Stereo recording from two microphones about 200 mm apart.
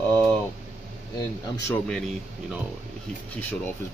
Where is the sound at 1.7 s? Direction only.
5° left (ahead or behind).